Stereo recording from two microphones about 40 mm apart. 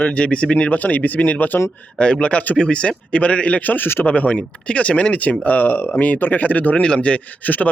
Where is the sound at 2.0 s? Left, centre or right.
Left.